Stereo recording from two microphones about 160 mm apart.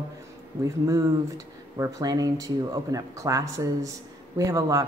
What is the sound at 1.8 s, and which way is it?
Speech, 20° right (ahead or behind).